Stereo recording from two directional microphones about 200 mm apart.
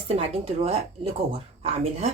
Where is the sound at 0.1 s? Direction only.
30° right (ahead or behind).